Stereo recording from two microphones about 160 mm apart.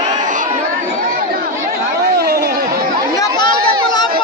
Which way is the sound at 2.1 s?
90° right.